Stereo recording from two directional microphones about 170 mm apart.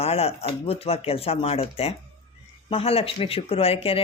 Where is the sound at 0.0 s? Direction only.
35° left (ahead or behind).